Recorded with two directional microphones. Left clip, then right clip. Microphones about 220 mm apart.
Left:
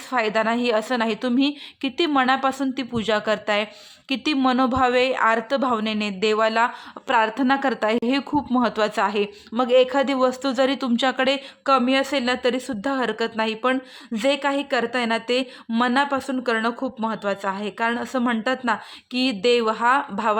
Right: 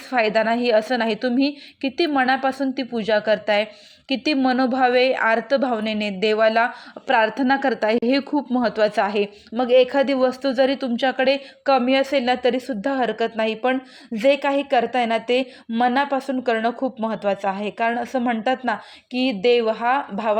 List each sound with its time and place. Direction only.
0.1 s a woman's voice: centre (ahead or behind)